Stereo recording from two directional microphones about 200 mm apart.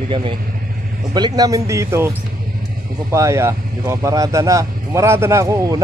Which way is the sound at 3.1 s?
15° right (ahead or behind).